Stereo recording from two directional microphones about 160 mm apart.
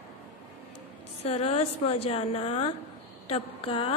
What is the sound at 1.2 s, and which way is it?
Speech, 40° left (ahead or behind).